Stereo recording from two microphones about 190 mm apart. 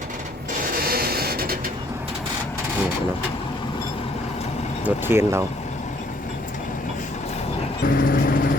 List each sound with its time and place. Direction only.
0.6 s a sound: 50° right (ahead or behind)
4.9 s speech: 10° right (ahead or behind)
7.9 s vehicle: 45° left (ahead or behind)